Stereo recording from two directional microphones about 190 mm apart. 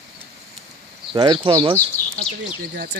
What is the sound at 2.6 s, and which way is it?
Speech, 60° right (ahead or behind).